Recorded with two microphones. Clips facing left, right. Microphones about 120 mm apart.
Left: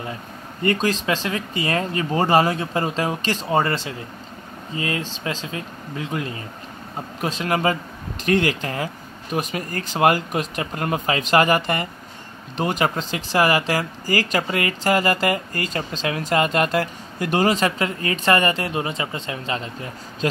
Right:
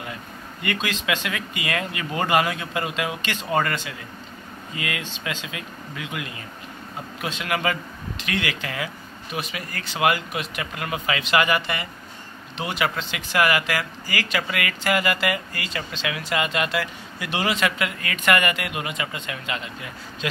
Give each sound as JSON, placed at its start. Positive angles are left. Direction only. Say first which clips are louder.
{"t": 0.6, "sound": "speech", "louder": "left 7 dB", "side_deg": 35}